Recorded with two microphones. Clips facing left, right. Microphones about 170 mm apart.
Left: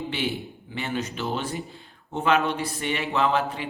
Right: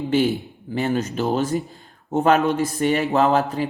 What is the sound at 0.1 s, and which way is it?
A man's voice, 45° right (ahead or behind).